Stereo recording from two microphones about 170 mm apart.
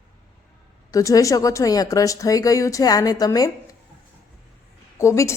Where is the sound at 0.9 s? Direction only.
20° left (ahead or behind).